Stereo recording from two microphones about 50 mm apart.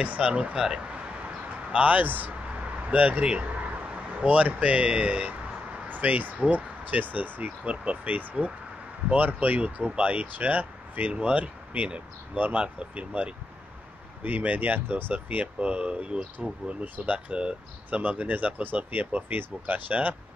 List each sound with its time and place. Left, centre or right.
0.0 s speech: right
1.7 s a man's voice: right
17.3 s speech: right
17.9 s speech: right